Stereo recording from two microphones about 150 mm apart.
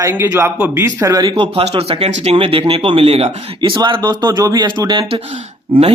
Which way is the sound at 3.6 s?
30° right (ahead or behind).